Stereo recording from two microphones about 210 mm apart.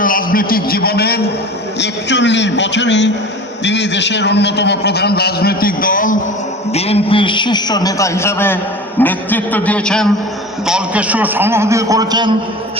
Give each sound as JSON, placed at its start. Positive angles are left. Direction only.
{"t": 0.0, "sound": "a man's voice", "side_deg": 40}
{"t": 6.7, "sound": "a man's voice", "side_deg": 30}